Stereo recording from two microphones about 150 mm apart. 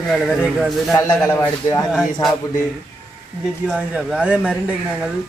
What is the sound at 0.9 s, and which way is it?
Speech, 20° left (ahead or behind).